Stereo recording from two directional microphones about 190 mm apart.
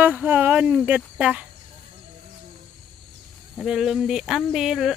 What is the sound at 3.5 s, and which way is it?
Speech, centre (ahead or behind).